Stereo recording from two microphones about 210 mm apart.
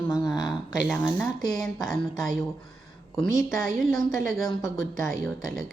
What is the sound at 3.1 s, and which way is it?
A woman's voice, centre (ahead or behind).